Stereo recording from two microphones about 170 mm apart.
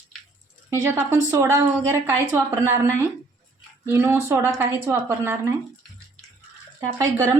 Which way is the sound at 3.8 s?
15° right (ahead or behind).